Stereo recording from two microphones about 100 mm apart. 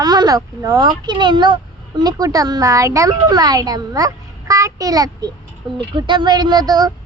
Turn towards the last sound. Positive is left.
turn(degrees=-40)  # may be behind; listen again after turning